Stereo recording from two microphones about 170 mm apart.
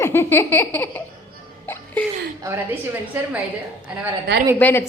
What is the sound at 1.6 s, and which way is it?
Music, 10° left (ahead or behind).